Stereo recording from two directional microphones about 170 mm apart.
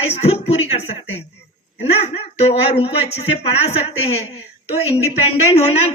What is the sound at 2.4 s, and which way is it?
Speech, 35° left (ahead or behind).